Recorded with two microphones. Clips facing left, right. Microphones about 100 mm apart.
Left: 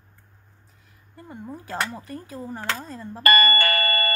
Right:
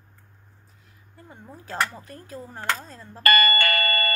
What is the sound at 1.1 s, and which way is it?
Speech, centre (ahead or behind).